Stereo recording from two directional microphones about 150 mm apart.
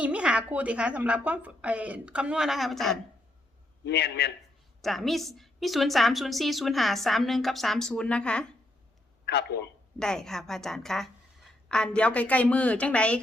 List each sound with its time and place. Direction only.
0.0 s a woman's voice: 10° right (ahead or behind)
3.8 s a man's voice: 90° left
4.8 s a woman's voice: centre (ahead or behind)
9.2 s speech: 90° left
10.0 s a woman's voice: 5° left (ahead or behind)